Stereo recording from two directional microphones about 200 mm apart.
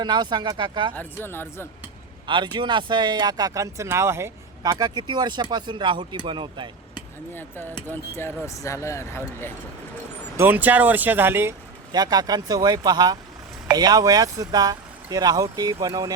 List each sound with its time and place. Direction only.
0.0 s speech: 20° right (ahead or behind)
0.9 s speech: 10° left (ahead or behind)
2.2 s speech: 25° right (ahead or behind)
7.9 s speech: 10° left (ahead or behind)
10.3 s speech: 10° right (ahead or behind)